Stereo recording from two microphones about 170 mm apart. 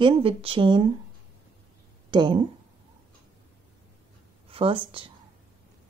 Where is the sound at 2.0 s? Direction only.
30° right (ahead or behind).